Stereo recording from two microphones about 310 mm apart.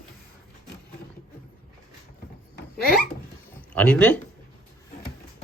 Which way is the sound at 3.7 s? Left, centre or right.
Centre.